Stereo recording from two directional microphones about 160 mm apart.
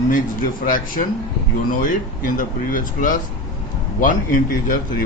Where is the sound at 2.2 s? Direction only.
55° left (ahead or behind).